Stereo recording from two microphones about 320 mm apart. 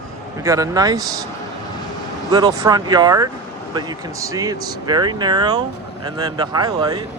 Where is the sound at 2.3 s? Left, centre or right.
Centre.